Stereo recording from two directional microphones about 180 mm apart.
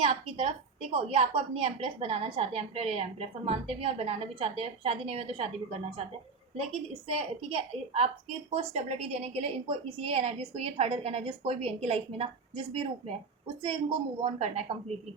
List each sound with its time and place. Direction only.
0.0 s a woman's voice: 35° right (ahead or behind)
14.2 s a woman's voice: 35° right (ahead or behind)